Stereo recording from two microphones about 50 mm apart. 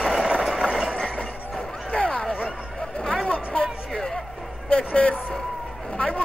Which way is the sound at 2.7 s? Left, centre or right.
Left.